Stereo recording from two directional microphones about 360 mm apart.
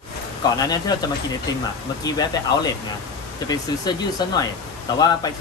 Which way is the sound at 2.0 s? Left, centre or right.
Centre.